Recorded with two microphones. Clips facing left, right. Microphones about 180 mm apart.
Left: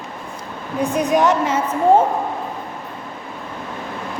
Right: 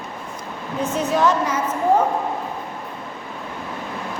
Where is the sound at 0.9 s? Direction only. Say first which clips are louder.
Left 2 dB; 15° left (ahead or behind).